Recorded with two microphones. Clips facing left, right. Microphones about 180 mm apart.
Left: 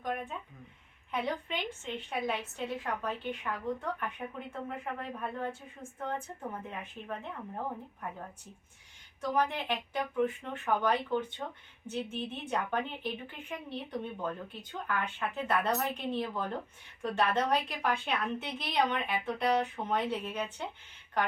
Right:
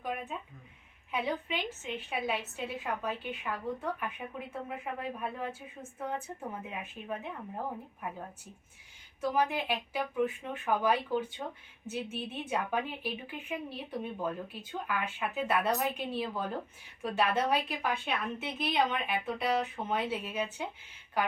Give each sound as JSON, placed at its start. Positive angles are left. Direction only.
{"t": 0.0, "sound": "a sound", "side_deg": -5}
{"t": 1.1, "sound": "a woman's voice", "side_deg": -5}
{"t": 9.3, "sound": "a woman's voice", "side_deg": -5}